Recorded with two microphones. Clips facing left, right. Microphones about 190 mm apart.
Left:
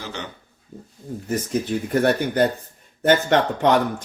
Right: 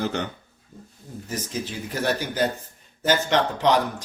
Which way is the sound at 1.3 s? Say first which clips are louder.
Left 8 dB; 60° left (ahead or behind).